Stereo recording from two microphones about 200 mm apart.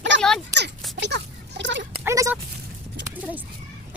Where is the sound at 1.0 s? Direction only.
60° right (ahead or behind).